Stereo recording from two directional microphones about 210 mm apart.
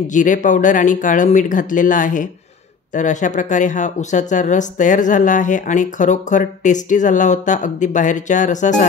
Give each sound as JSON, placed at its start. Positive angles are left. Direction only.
{"t": 0.1, "sound": "speech", "side_deg": 35}